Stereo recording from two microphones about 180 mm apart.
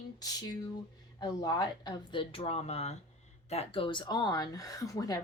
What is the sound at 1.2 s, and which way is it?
Speech, 20° left (ahead or behind).